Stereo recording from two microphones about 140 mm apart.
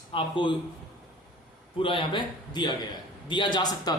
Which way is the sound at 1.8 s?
35° left (ahead or behind).